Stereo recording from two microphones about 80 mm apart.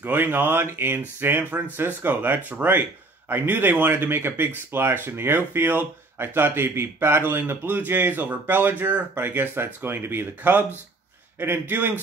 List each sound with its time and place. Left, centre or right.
0.0 s speech: right